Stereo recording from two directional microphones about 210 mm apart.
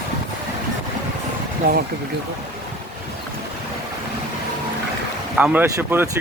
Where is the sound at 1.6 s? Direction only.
45° right (ahead or behind).